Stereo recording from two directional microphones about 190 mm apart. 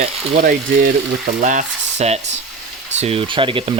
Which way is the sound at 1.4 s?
40° right (ahead or behind).